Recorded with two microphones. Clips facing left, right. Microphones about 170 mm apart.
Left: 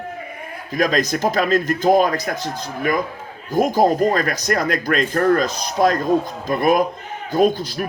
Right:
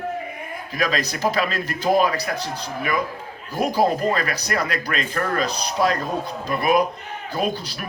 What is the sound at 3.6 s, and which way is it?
Speech, 45° left (ahead or behind).